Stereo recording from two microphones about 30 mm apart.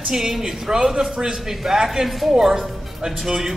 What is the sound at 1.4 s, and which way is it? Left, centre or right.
Speech, centre.